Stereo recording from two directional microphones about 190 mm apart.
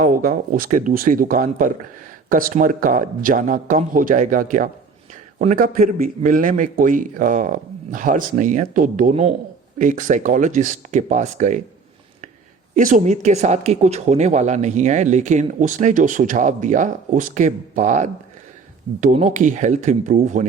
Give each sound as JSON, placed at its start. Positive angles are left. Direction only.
{"t": 0.0, "sound": "speech", "side_deg": -45}
{"t": 12.7, "sound": "speech", "side_deg": -45}